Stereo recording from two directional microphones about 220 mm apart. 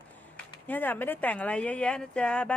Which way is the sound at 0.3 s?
10° left (ahead or behind).